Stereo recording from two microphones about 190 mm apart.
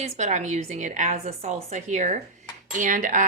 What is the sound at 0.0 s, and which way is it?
A woman's voice, 35° right (ahead or behind).